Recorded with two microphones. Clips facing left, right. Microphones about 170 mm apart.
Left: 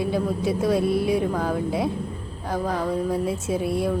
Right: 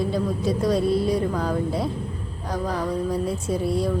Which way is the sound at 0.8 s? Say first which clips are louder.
Even; 60° left (ahead or behind).